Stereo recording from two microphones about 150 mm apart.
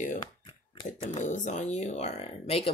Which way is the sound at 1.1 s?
55° left (ahead or behind).